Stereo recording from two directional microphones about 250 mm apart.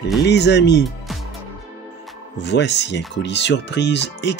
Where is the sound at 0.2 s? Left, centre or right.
Left.